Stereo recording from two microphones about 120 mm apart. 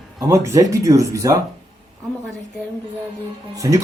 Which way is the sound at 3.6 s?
30° right (ahead or behind).